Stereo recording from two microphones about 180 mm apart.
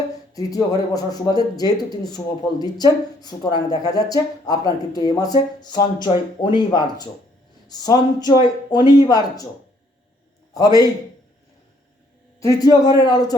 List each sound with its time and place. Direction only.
0.3 s speech: 20° left (ahead or behind)
10.5 s speech: 20° left (ahead or behind)
12.4 s speech: 20° left (ahead or behind)